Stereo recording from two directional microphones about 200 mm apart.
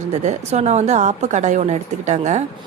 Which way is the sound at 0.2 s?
35° right (ahead or behind).